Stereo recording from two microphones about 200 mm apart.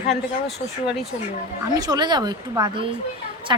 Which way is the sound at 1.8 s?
20° right (ahead or behind).